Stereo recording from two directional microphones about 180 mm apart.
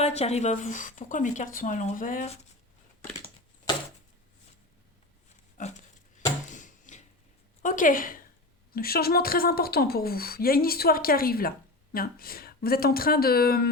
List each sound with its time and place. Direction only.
0.0 s speech: 35° left (ahead or behind)
5.5 s a sound: 45° left (ahead or behind)
7.6 s a woman's voice: 50° left (ahead or behind)